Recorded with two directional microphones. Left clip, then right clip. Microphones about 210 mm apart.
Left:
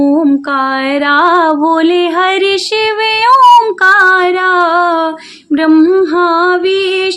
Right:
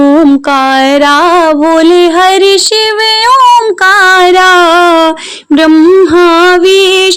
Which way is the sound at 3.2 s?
25° right (ahead or behind).